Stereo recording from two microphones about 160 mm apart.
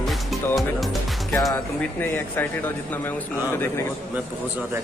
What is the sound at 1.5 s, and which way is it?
Speech, 15° left (ahead or behind).